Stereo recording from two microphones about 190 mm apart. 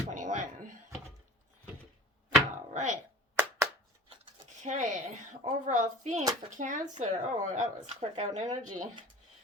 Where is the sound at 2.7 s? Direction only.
40° right (ahead or behind).